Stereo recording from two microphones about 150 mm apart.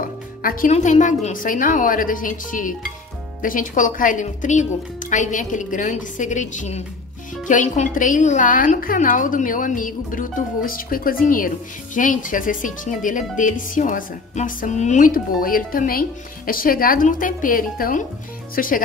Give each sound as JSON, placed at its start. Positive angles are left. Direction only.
{"t": 0.0, "sound": "music", "side_deg": 70}
{"t": 0.7, "sound": "a woman's voice", "side_deg": 50}